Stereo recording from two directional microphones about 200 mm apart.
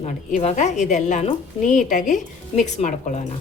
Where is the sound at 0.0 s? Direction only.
35° left (ahead or behind).